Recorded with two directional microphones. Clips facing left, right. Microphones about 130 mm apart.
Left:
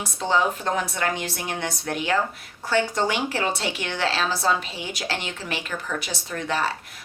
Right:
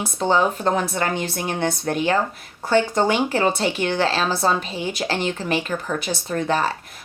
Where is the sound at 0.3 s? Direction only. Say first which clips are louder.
Right 4 dB; 35° right (ahead or behind).